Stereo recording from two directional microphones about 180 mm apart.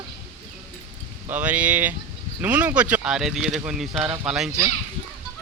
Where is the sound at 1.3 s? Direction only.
10° right (ahead or behind).